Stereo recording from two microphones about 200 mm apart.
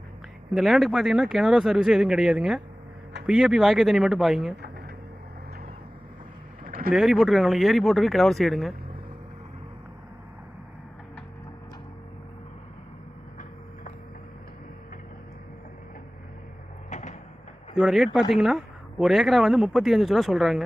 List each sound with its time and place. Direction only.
0.5 s speech: centre (ahead or behind)
6.7 s a sound: 45° right (ahead or behind)
6.9 s speech: centre (ahead or behind)
16.9 s cupboard open or close: 35° left (ahead or behind)
17.7 s speech: centre (ahead or behind)